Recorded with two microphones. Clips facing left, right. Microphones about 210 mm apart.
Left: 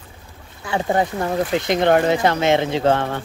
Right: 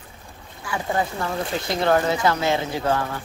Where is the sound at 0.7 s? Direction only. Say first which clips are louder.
Left 5 dB; 30° left (ahead or behind).